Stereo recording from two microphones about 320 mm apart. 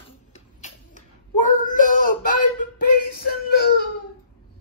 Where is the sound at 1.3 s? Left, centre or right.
Left.